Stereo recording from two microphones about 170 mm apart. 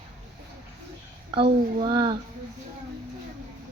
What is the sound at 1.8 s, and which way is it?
Speech, 25° right (ahead or behind).